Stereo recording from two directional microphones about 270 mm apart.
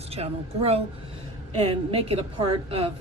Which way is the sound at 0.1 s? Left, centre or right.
Right.